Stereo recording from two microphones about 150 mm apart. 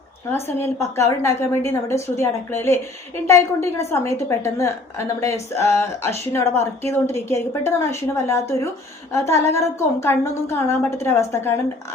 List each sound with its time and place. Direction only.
0.3 s a woman's voice: 15° left (ahead or behind)